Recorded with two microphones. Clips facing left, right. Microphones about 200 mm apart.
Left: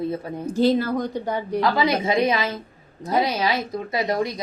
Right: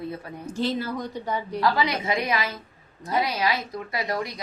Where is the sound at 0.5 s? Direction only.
40° left (ahead or behind).